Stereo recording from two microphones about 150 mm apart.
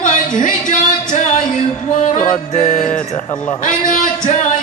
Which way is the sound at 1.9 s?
55° left (ahead or behind).